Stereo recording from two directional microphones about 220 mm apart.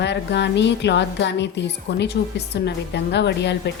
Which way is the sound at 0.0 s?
50° left (ahead or behind).